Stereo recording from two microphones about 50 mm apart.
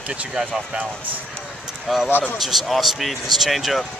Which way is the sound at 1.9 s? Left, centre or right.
Centre.